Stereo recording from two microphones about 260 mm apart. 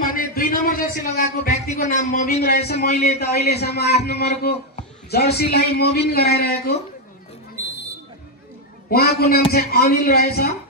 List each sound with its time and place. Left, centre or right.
0.0 s a man's voice: left
8.9 s a man's voice: left